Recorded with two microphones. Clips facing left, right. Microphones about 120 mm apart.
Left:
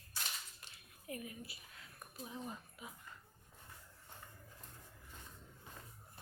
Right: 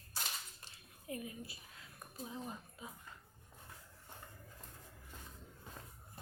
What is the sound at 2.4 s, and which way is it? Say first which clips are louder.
Speech: right 1 dB; 25° right (ahead or behind).